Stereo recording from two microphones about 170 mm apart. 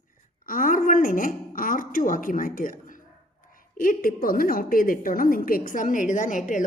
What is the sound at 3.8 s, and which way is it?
A woman's voice, 55° left (ahead or behind).